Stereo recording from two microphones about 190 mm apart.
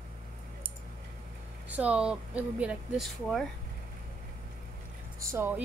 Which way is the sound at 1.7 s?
5° right (ahead or behind).